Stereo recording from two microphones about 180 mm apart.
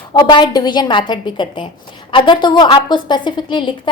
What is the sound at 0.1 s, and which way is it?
A woman's voice, 25° left (ahead or behind).